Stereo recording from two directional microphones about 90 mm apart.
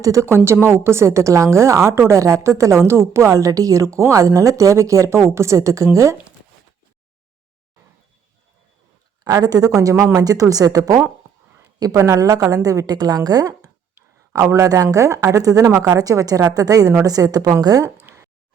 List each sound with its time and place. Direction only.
0.0 s a woman's voice: 35° right (ahead or behind)
9.2 s a woman's voice: 45° right (ahead or behind)
13.9 s a woman's voice: 35° right (ahead or behind)
18.0 s a sound: 30° right (ahead or behind)